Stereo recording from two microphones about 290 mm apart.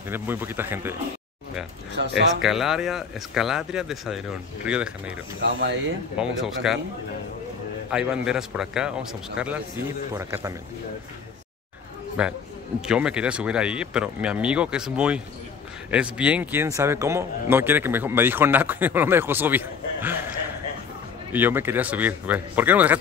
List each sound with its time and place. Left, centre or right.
0.1 s speech: centre
2.0 s speech: right
2.4 s speech: centre
5.4 s speech: right
6.1 s speech: centre
7.9 s speech: centre
12.2 s speech: centre
21.3 s speech: centre